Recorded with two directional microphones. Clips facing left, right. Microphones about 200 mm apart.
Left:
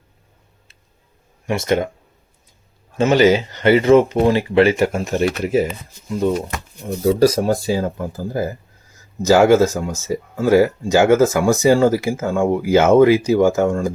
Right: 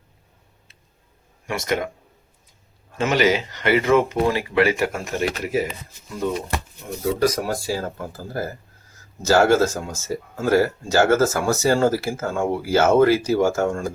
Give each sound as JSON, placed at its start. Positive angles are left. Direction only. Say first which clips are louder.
{"t": 1.5, "sound": "speech", "louder": "left 6 dB", "side_deg": 25}
{"t": 3.0, "sound": "speech", "louder": "left 6 dB", "side_deg": 30}
{"t": 7.0, "sound": "speech", "louder": "left 6 dB", "side_deg": 30}